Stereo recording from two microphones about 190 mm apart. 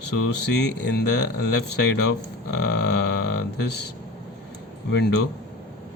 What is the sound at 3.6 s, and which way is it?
Speech, 60° left (ahead or behind).